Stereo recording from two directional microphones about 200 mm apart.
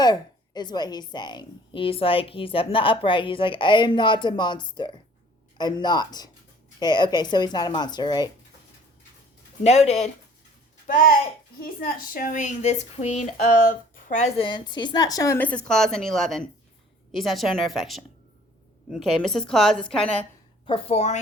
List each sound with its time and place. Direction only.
0.0 s speech: 20° left (ahead or behind)
9.6 s a woman's voice: 35° left (ahead or behind); by 20.2 s 5° left (ahead or behind)
20.7 s speech: 30° left (ahead or behind)